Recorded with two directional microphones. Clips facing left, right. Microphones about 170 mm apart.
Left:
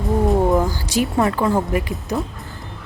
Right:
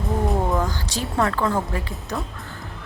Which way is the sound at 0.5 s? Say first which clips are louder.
Left 6 dB; 10° left (ahead or behind).